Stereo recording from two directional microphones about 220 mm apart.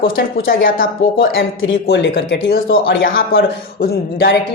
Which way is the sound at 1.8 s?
50° left (ahead or behind).